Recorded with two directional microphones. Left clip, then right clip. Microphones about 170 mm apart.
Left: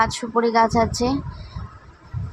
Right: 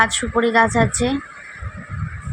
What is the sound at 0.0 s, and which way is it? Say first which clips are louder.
Speech: right 2 dB; 15° right (ahead or behind).